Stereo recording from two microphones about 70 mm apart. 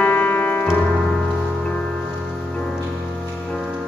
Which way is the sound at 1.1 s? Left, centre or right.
Centre.